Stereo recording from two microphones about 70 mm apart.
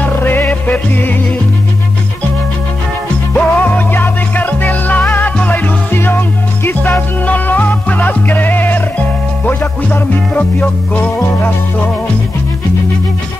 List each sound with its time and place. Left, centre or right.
0.0 s music: left
3.3 s music: left